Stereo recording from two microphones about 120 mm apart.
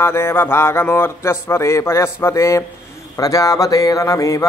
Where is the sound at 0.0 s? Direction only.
20° left (ahead or behind).